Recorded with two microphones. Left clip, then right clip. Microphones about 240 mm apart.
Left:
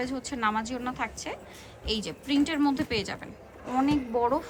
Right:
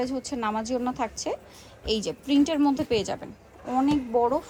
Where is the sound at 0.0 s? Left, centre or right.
Centre.